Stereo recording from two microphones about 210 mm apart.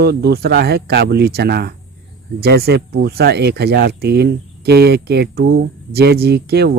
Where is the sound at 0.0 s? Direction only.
50° right (ahead or behind).